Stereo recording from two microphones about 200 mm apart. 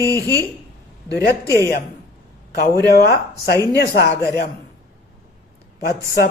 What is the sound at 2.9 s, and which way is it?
Speech, 50° left (ahead or behind).